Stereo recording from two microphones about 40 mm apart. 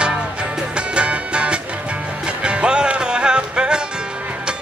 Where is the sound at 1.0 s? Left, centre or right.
Right.